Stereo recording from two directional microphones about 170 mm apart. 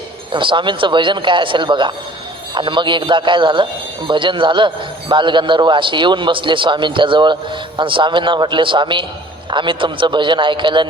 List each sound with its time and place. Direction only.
0.3 s a man's voice: 30° right (ahead or behind)